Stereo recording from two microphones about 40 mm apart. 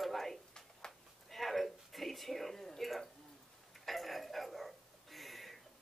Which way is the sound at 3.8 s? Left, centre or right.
Centre.